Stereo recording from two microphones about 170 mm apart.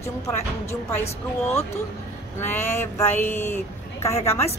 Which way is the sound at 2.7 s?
15° left (ahead or behind).